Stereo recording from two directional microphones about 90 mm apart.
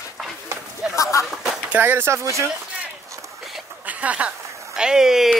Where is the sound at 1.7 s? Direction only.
25° right (ahead or behind).